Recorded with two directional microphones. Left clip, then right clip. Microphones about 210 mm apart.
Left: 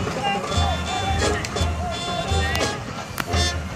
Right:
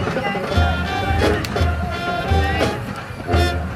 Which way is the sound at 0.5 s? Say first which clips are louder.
Right 3 dB; 30° right (ahead or behind).